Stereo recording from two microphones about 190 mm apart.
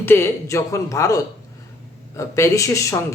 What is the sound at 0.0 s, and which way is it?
Speech, 15° left (ahead or behind).